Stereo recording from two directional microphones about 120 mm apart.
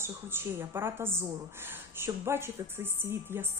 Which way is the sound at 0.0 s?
20° right (ahead or behind).